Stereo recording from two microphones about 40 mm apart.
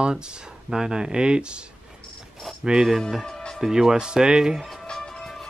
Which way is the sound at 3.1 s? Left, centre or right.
Centre.